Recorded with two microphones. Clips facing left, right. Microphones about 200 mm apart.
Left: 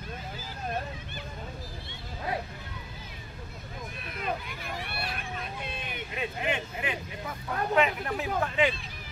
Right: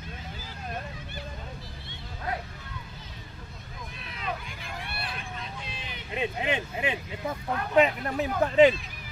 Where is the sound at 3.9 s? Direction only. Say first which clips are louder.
Left 2 dB; 55° left (ahead or behind).